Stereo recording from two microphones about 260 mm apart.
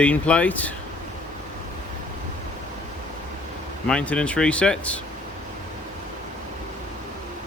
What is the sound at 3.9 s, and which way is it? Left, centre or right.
Speech, centre.